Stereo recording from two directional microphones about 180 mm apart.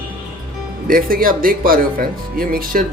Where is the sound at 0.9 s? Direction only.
50° right (ahead or behind).